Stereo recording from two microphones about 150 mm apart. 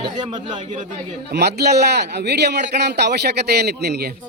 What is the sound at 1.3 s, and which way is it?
A man's voice, 90° right.